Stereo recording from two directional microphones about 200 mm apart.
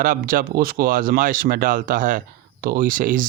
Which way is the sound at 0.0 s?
45° right (ahead or behind).